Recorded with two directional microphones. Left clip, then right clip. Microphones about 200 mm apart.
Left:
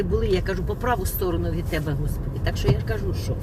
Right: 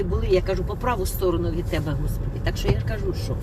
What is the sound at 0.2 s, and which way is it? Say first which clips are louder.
Speech: right 2 dB; 15° left (ahead or behind).